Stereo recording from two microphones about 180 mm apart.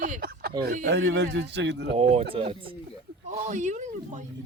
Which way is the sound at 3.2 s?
40° right (ahead or behind).